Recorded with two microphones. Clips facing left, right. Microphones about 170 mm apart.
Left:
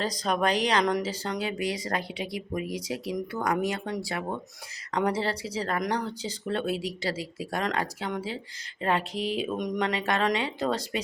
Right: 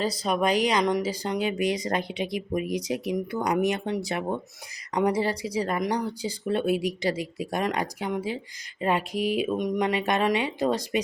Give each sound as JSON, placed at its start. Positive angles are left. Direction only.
{"t": 0.0, "sound": "speech", "side_deg": -10}
{"t": 9.8, "sound": "speech", "side_deg": -15}